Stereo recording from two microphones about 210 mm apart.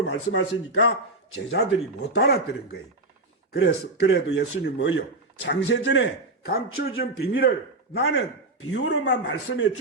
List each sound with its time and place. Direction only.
0.0 s speech: 60° left (ahead or behind)
1.5 s speech: 50° left (ahead or behind)
8.0 s speech: 80° left; by 9.6 s 55° left (ahead or behind)